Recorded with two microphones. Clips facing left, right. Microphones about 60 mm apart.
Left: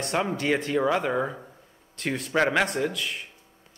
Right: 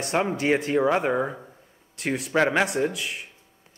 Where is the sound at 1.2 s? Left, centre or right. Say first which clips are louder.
Right 1 dB; centre.